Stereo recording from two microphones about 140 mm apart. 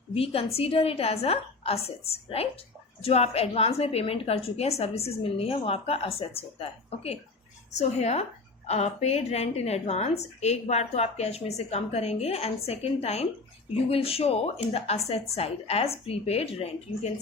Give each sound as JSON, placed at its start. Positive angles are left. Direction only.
{"t": 0.1, "sound": "a woman's voice", "side_deg": 45}